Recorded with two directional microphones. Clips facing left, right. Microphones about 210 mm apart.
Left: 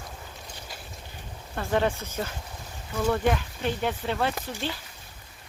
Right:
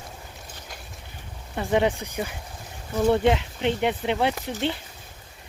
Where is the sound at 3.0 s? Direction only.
25° right (ahead or behind).